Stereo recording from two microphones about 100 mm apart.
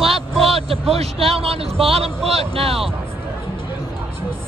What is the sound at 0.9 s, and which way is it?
A man's voice, 80° right.